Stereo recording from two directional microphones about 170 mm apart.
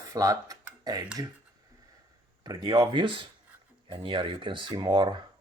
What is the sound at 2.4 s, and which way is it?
Speech, 25° right (ahead or behind).